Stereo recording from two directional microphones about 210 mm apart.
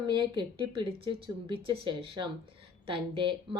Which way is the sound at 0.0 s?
20° right (ahead or behind).